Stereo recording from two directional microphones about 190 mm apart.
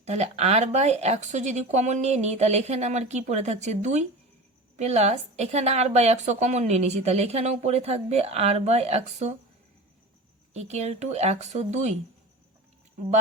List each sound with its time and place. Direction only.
0.0 s a woman's voice: 35° right (ahead or behind)
10.5 s a woman's voice: 35° right (ahead or behind)